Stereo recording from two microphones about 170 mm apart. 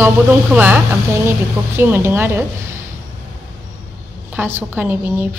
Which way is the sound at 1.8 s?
15° right (ahead or behind).